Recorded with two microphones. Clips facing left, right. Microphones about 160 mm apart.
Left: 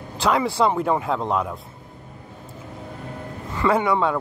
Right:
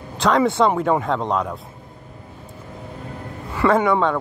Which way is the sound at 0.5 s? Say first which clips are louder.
Right 2 dB; centre (ahead or behind).